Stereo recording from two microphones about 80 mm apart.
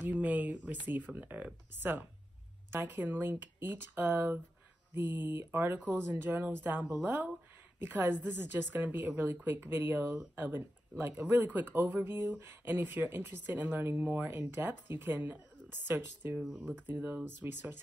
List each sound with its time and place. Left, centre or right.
0.0 s speech: right
16.4 s speech: centre